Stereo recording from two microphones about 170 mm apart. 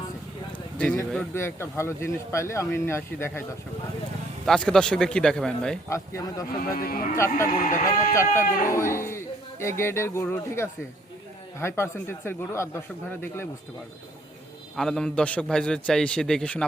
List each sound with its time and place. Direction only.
0.8 s a man's voice: 5° left (ahead or behind)
4.4 s a man's voice: 5° left (ahead or behind)
5.9 s speech: 20° left (ahead or behind)
6.6 s speech: 60° left (ahead or behind)
8.1 s a man's voice: 15° left (ahead or behind)
14.8 s a man's voice: 5° left (ahead or behind)